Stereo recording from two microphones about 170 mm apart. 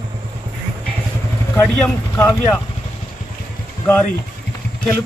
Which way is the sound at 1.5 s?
15° left (ahead or behind).